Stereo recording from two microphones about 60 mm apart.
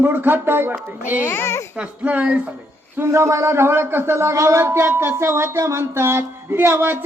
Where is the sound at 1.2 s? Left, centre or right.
Left.